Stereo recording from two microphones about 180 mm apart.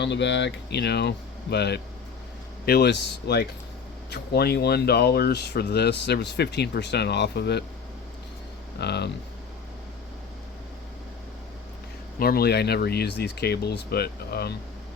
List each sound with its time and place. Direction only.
0.0 s speech: 75° left (ahead or behind)
8.8 s speech: 70° left (ahead or behind)
12.2 s speech: 60° left (ahead or behind)